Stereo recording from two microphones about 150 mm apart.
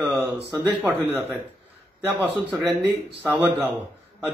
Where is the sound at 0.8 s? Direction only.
15° right (ahead or behind).